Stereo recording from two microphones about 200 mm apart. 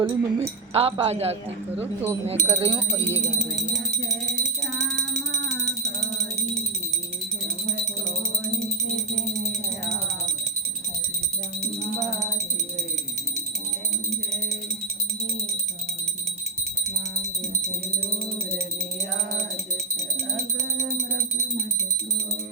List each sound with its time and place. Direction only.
0.0 s speech: 20° right (ahead or behind)
0.4 s speech: 30° right (ahead or behind)
1.8 s speech: 10° right (ahead or behind)
2.2 s speech: 30° right (ahead or behind)